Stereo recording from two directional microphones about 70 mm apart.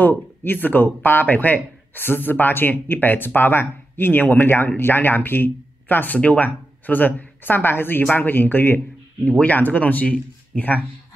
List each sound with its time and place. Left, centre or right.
0.0 s speech: left